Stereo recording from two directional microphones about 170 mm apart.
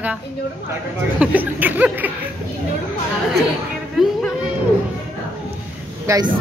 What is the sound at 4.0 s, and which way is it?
Speech, centre (ahead or behind).